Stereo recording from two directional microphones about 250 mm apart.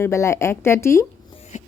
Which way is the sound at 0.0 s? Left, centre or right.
Centre.